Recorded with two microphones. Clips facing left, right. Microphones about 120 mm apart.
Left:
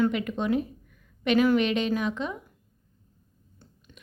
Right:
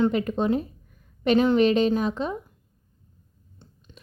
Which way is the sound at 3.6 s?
25° right (ahead or behind).